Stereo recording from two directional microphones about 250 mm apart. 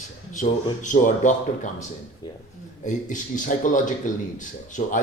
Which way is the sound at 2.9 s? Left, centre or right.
Left.